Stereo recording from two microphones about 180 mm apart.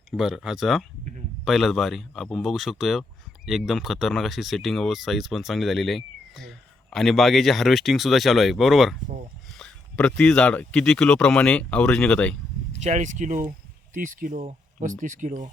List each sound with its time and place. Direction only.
0.1 s speech: centre (ahead or behind)
12.7 s speech: 40° right (ahead or behind)